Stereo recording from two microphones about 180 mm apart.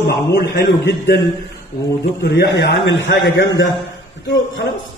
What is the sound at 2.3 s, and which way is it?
A man's voice, 65° left (ahead or behind).